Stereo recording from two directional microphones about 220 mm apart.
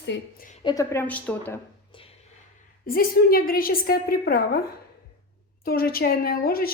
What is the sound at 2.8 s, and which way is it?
A woman's voice, 40° left (ahead or behind).